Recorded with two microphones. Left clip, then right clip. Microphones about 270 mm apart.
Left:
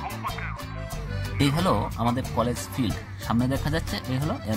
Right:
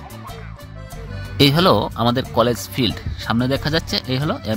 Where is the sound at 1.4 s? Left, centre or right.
Centre.